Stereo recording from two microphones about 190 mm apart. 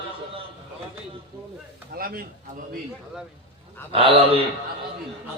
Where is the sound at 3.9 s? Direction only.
30° right (ahead or behind).